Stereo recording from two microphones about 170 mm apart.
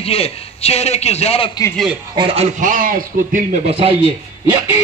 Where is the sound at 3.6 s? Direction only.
35° right (ahead or behind).